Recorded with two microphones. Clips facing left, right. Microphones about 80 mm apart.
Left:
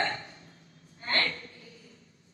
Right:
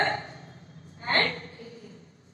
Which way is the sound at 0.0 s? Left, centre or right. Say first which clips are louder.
Right 5 dB; right.